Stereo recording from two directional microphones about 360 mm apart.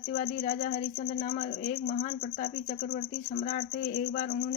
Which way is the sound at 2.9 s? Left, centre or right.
Left.